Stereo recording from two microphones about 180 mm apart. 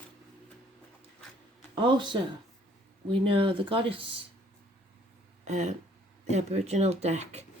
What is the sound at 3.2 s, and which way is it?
Speech, 30° right (ahead or behind).